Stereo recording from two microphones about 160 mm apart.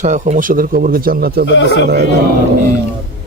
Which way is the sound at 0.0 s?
50° right (ahead or behind).